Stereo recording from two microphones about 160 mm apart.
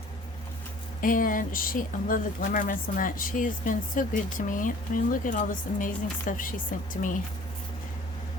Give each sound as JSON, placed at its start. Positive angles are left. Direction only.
{"t": 1.0, "sound": "speech", "side_deg": 60}